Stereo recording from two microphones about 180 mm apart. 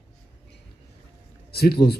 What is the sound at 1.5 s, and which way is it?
Speech, 60° left (ahead or behind).